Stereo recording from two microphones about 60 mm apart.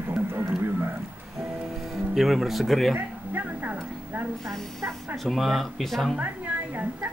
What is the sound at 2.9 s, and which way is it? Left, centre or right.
A woman's voice, right.